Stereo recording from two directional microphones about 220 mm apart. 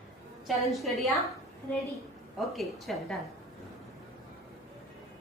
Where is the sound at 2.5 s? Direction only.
Centre (ahead or behind).